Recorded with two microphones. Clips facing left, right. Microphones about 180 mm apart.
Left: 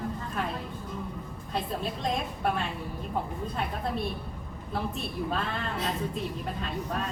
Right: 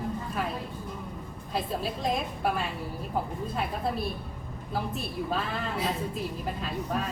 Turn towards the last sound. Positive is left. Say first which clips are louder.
# right 1 dB
turn(degrees=-5)  # may be behind; listen again after turning